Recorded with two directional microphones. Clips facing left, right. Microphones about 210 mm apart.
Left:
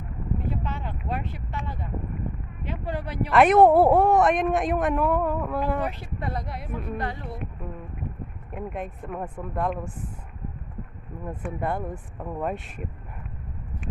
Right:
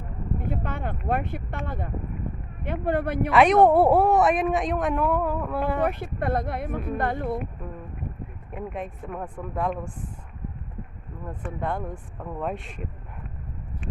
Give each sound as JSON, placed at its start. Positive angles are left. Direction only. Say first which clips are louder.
{"t": 0.3, "sound": "speech", "louder": "right 1 dB", "side_deg": -55}
{"t": 3.3, "sound": "speech", "louder": "left 1 dB", "side_deg": 5}
{"t": 5.8, "sound": "speech", "louder": "right 5 dB", "side_deg": -55}
{"t": 8.5, "sound": "speech", "louder": "even", "side_deg": 0}
{"t": 11.3, "sound": "speech", "louder": "left 1 dB", "side_deg": 5}